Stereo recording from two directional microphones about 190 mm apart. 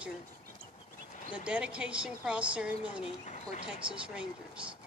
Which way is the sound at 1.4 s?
5° right (ahead or behind).